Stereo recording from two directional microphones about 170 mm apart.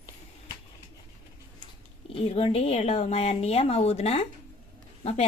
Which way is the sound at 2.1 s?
35° left (ahead or behind).